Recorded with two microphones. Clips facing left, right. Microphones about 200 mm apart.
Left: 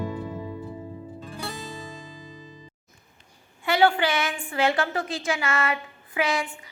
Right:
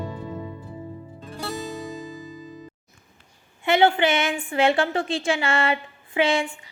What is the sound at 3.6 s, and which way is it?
A woman's voice, 25° right (ahead or behind).